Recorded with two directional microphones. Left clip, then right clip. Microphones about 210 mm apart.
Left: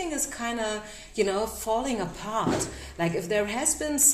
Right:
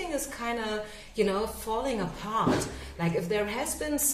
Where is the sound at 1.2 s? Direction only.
40° left (ahead or behind).